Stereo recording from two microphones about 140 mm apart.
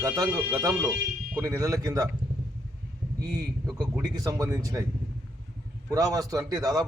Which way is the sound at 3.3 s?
25° right (ahead or behind).